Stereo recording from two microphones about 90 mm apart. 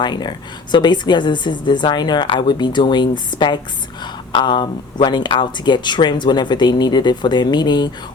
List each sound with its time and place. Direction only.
0.0 s speech: 55° left (ahead or behind)